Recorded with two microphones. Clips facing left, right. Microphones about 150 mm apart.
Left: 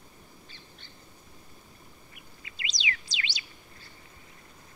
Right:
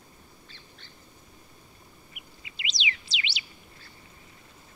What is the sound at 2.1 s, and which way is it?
Bird, 20° right (ahead or behind).